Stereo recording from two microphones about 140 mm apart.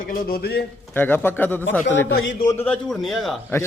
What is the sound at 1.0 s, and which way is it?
Speech, 15° left (ahead or behind).